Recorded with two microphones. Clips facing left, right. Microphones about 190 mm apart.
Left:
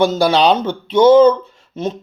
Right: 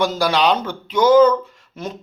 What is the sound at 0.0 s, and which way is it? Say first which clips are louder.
A man's voice: left 5 dB; 25° left (ahead or behind).